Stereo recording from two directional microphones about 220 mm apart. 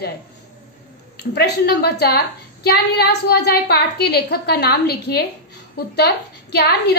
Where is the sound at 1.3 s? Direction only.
45° left (ahead or behind).